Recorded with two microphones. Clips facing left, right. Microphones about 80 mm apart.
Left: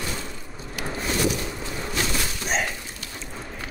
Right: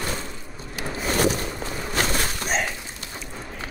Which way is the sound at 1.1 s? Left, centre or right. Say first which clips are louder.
Right 3 dB; right.